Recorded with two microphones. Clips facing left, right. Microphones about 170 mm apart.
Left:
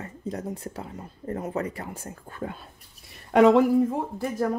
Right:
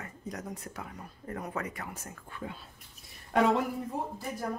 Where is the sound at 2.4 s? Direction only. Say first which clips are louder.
Left 7 dB; 50° left (ahead or behind).